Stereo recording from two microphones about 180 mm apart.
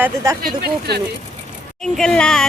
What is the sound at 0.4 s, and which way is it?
Speech, 60° right (ahead or behind).